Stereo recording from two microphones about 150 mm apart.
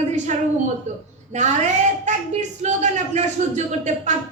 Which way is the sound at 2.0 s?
50° right (ahead or behind).